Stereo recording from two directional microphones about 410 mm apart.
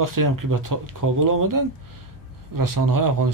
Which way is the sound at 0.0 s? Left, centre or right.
Right.